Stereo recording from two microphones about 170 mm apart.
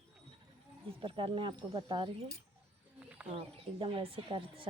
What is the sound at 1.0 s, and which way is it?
Speech, 30° right (ahead or behind).